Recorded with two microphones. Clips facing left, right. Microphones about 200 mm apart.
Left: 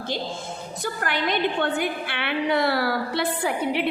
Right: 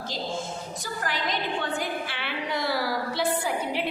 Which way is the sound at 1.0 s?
65° left (ahead or behind).